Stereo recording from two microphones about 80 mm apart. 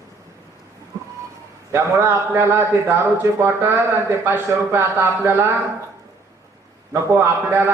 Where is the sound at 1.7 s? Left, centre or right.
Right.